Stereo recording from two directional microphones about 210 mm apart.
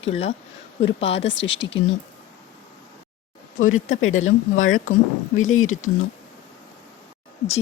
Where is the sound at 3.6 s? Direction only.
70° left (ahead or behind).